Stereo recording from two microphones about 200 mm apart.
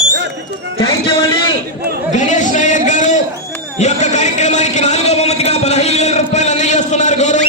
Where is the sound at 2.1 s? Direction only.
40° left (ahead or behind).